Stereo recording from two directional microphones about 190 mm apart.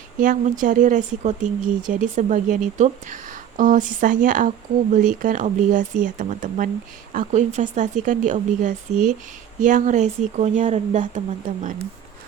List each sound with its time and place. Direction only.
0.2 s speech: 45° right (ahead or behind)